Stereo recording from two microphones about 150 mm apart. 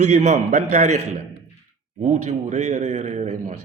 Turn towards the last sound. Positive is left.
turn(degrees=-55)  # may be behind; listen again after turning